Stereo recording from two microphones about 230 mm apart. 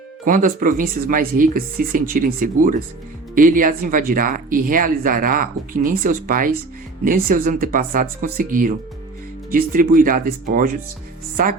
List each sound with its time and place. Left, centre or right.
0.3 s speech: right